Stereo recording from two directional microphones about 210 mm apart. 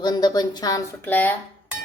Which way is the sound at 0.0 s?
20° left (ahead or behind).